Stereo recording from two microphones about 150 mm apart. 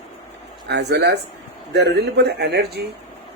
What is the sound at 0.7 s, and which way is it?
Speech, 90° right.